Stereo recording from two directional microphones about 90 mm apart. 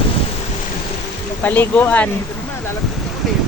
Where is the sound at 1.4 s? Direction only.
20° left (ahead or behind).